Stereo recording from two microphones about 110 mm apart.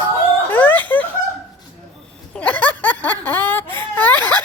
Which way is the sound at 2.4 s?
15° left (ahead or behind).